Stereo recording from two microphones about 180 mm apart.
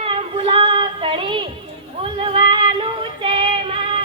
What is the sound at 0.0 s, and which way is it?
Child singing, 30° right (ahead or behind).